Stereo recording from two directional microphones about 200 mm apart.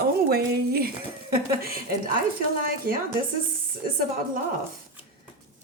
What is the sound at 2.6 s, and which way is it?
Speech, 45° right (ahead or behind).